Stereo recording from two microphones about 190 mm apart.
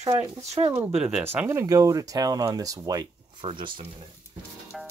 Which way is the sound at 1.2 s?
10° right (ahead or behind).